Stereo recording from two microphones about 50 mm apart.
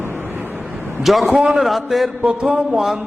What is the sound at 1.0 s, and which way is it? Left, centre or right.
A man's voice, centre.